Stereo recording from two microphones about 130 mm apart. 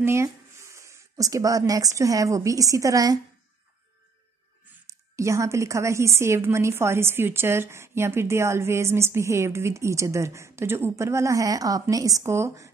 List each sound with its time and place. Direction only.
0.0 s speech: 20° right (ahead or behind)
4.8 s a woman's voice: 20° right (ahead or behind)